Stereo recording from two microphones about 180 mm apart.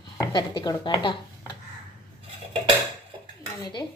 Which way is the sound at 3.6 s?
25° left (ahead or behind).